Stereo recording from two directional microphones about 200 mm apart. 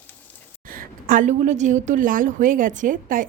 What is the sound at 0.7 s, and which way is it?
A woman's voice, 45° right (ahead or behind).